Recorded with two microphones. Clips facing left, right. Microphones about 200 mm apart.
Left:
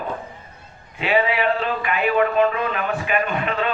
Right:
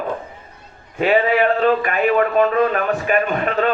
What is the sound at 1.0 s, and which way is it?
A man's voice, 45° right (ahead or behind).